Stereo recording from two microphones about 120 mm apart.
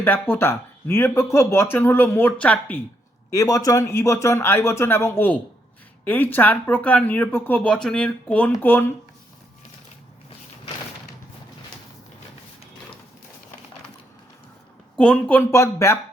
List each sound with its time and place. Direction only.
0.0 s speech: 15° left (ahead or behind)
3.3 s speech: 30° left (ahead or behind); by 8.5 s 10° left (ahead or behind)
14.9 s speech: 10° left (ahead or behind)